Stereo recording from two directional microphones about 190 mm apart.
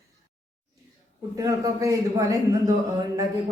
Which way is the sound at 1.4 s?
20° right (ahead or behind).